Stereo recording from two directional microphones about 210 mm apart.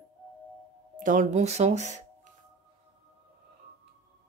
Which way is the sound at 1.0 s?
35° right (ahead or behind).